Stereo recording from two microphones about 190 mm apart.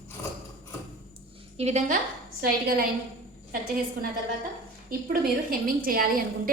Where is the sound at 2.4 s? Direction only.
50° right (ahead or behind).